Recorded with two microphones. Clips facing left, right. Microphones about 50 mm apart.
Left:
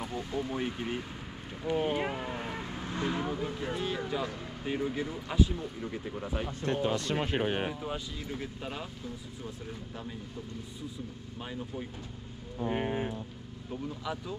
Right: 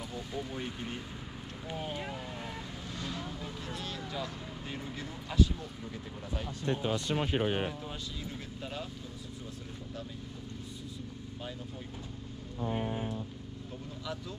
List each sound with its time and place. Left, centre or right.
0.5 s speech: centre
1.7 s speech: left
6.6 s speech: left
7.8 s speech: centre
12.6 s speech: left